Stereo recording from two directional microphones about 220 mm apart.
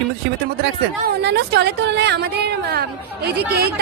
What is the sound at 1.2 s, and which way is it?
A woman's voice, 50° right (ahead or behind).